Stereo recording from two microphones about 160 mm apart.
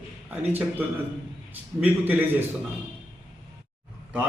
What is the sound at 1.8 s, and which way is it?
Speech, 10° right (ahead or behind).